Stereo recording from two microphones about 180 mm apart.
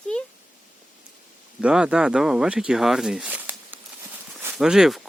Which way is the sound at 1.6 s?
5° right (ahead or behind).